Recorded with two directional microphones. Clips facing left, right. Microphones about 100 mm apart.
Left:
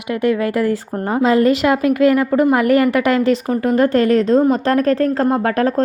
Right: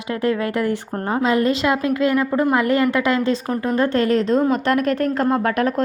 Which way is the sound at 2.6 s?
30° right (ahead or behind).